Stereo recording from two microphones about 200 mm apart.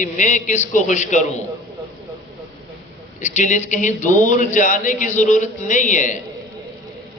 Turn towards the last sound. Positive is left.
turn(degrees=40)  # may be behind; listen again after turning